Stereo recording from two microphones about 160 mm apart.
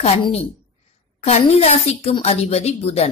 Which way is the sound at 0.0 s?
40° left (ahead or behind).